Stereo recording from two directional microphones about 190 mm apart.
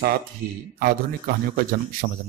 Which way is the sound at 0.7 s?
50° right (ahead or behind).